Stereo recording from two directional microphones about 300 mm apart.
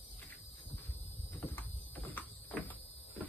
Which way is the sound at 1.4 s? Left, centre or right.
Centre.